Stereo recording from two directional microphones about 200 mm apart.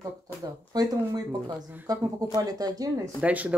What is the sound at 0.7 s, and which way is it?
Speech, 20° right (ahead or behind).